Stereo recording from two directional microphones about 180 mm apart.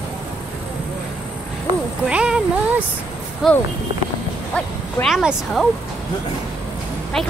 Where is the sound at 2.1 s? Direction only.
5° right (ahead or behind).